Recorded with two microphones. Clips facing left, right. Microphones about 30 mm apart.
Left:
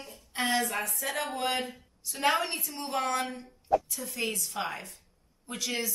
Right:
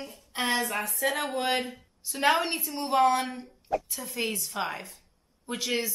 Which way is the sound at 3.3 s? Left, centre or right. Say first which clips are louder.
Left 3 dB; right.